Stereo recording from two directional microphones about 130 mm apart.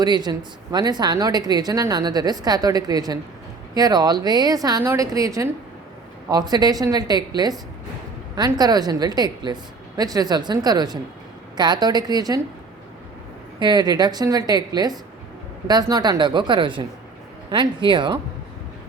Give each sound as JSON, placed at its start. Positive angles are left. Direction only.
{"t": 0.0, "sound": "speech", "side_deg": -30}
{"t": 13.6, "sound": "speech", "side_deg": -35}